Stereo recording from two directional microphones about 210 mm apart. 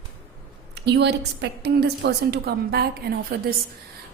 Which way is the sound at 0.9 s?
55° right (ahead or behind).